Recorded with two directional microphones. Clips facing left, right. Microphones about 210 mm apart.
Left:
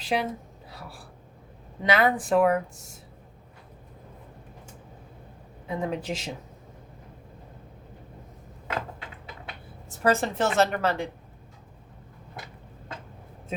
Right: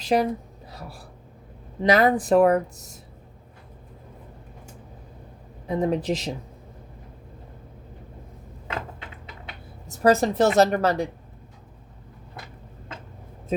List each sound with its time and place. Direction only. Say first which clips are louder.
0.0 s a woman's voice: right 6 dB; 40° right (ahead or behind)
0.7 s gasp: right 3 dB; 40° right (ahead or behind)
1.8 s speech: right 4 dB; 40° right (ahead or behind)
5.6 s speech: right 6 dB; 40° right (ahead or behind)
10.0 s speech: right 5 dB; 40° right (ahead or behind)